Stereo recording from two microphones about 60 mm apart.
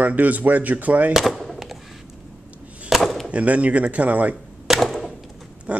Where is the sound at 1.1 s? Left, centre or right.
Centre.